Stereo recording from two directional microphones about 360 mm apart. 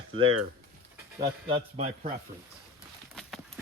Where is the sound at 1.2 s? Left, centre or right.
Centre.